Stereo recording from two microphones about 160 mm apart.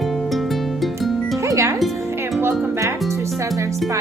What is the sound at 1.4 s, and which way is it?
Music, 20° right (ahead or behind).